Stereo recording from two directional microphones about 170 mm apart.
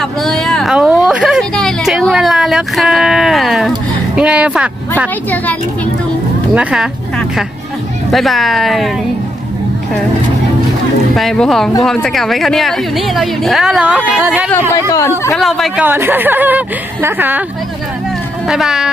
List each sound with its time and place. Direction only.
0.0 s a sound: centre (ahead or behind)
6.5 s a woman's voice: 5° right (ahead or behind)
8.1 s a woman's voice: centre (ahead or behind)
11.1 s a woman's voice: centre (ahead or behind)
14.7 s speech: 20° left (ahead or behind)
15.4 s a woman's voice: centre (ahead or behind)
15.8 s a woman's voice: 10° right (ahead or behind)
18.4 s a woman's voice: 5° right (ahead or behind)